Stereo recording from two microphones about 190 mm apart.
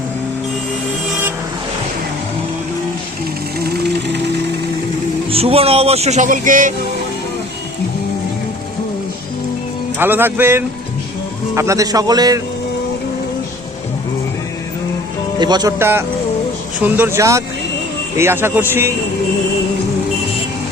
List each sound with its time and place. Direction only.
3.6 s a sound: 60° right (ahead or behind)
5.3 s speech: 30° right (ahead or behind)
10.0 s a man's voice: 10° right (ahead or behind)
15.4 s a man's voice: 20° right (ahead or behind)